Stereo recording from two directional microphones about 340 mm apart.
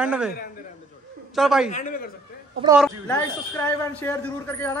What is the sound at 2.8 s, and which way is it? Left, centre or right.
A man's voice, centre.